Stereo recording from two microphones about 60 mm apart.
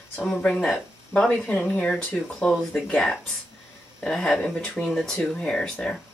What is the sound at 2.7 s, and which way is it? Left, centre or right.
Speech, centre.